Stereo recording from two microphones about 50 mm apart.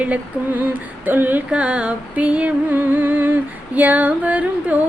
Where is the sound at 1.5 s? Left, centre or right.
Right.